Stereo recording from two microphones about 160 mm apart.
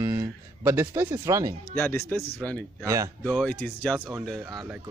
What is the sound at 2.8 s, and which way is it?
Speech, 20° right (ahead or behind).